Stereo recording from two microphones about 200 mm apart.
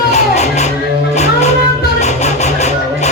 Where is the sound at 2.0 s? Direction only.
35° left (ahead or behind).